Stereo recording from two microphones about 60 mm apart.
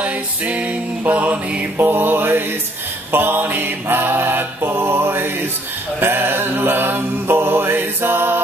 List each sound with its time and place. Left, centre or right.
0.0 s music: right
1.9 s mantra: right